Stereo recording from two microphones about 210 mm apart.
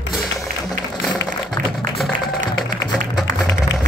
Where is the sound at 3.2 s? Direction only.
15° left (ahead or behind).